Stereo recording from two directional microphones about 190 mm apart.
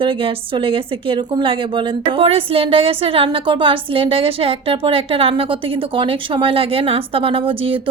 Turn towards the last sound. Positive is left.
turn(degrees=-30)  # may be behind; listen again after turning